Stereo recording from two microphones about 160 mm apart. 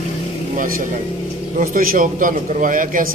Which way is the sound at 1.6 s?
65° right (ahead or behind).